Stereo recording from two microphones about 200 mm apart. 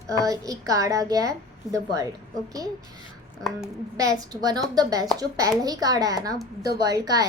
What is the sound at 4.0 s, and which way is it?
A woman's voice, 20° right (ahead or behind).